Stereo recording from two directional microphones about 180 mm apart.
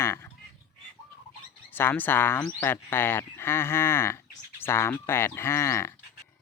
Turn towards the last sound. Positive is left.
turn(degrees=15)  # may be behind; listen again after turning